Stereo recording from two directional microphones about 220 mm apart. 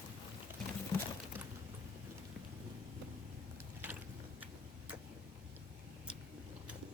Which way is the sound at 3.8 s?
5° right (ahead or behind).